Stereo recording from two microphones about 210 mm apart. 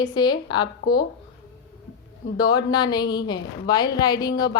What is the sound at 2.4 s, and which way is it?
A woman's voice, 20° left (ahead or behind).